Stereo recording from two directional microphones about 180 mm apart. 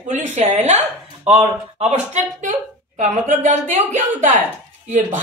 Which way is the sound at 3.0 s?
40° right (ahead or behind).